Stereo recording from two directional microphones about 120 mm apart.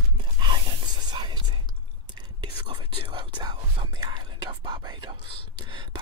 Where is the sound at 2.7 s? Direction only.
45° right (ahead or behind).